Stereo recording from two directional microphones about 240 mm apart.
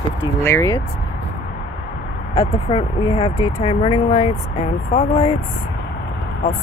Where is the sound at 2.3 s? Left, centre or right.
Centre.